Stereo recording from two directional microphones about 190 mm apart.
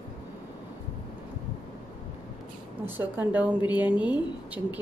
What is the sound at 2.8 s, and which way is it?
Speech, 10° right (ahead or behind).